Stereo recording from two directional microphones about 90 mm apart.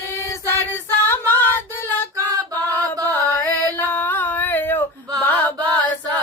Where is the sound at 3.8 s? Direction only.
20° left (ahead or behind).